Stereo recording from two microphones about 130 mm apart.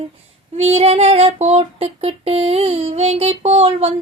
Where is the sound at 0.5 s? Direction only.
55° right (ahead or behind).